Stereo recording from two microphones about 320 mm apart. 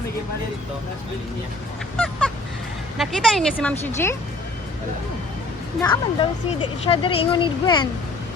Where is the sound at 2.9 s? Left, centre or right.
Centre.